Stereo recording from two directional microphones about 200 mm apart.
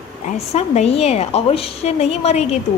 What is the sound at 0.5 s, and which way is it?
A woman's voice, 35° left (ahead or behind).